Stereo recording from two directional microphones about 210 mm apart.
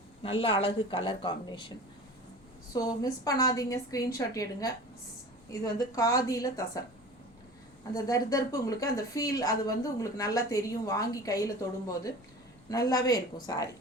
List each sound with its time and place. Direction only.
0.2 s speech: 25° left (ahead or behind)
2.7 s a woman's voice: 15° left (ahead or behind)
7.9 s a woman's voice: 15° left (ahead or behind)
12.7 s a woman's voice: 15° left (ahead or behind)